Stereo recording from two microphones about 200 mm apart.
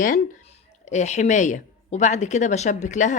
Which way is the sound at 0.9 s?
35° left (ahead or behind).